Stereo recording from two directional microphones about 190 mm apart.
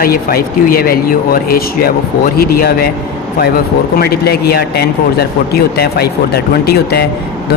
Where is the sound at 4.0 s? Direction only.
55° left (ahead or behind).